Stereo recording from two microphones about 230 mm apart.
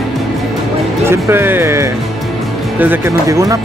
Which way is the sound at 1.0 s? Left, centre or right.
Centre.